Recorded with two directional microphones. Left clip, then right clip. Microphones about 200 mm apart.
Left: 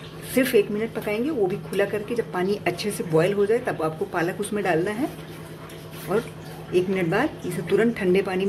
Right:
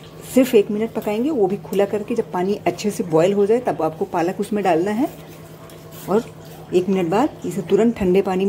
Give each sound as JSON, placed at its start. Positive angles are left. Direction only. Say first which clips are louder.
{"t": 0.3, "sound": "a woman's voice", "louder": "right 5 dB", "side_deg": -25}
{"t": 6.1, "sound": "a woman's voice", "louder": "right 5 dB", "side_deg": -25}